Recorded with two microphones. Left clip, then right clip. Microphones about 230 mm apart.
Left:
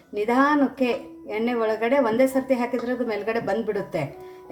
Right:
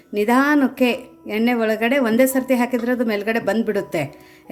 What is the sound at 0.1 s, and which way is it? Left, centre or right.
A woman's voice, right.